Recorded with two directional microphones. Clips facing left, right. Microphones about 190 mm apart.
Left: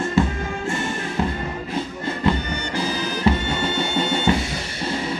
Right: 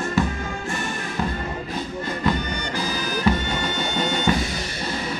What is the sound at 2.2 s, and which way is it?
Music, 25° left (ahead or behind).